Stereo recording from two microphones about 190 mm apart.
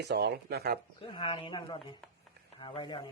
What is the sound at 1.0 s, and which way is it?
Speech, 25° left (ahead or behind).